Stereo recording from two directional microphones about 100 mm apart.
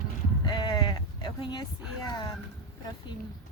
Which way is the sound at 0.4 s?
45° left (ahead or behind).